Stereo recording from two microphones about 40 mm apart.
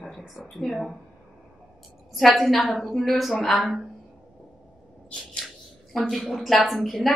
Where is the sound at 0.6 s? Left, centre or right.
Centre.